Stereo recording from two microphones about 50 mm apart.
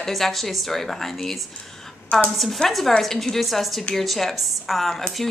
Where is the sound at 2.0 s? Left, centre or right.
Left.